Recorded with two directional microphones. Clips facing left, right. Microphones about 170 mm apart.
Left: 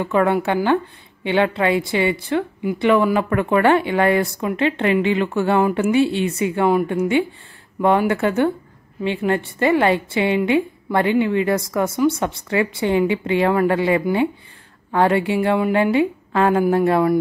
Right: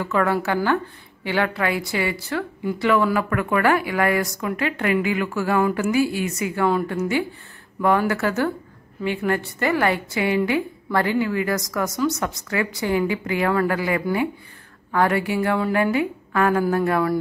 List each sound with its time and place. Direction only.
0.0 s a woman's voice: 20° left (ahead or behind)